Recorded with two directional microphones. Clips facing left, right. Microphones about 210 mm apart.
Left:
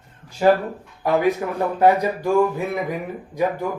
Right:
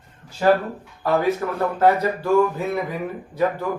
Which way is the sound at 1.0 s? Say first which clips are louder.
Left 1 dB; 15° left (ahead or behind).